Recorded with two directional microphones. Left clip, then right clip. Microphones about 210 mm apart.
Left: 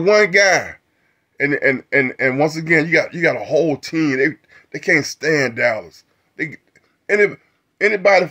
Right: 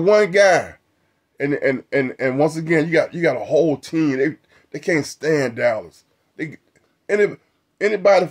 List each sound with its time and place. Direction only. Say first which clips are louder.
0.0 s a man's voice: left 1 dB; 5° left (ahead or behind)